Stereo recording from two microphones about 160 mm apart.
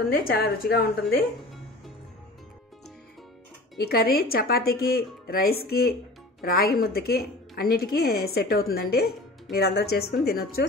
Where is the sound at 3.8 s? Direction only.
75° left (ahead or behind).